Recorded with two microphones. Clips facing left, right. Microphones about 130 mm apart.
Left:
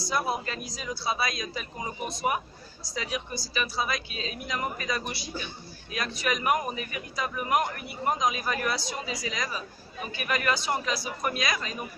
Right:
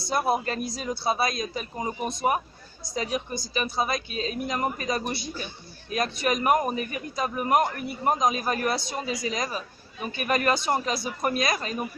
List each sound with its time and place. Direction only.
0.1 s a man's voice: 50° right (ahead or behind)